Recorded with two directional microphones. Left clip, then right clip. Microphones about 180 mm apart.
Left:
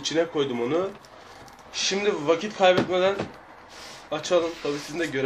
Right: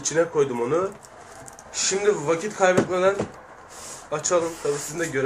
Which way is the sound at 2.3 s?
30° left (ahead or behind).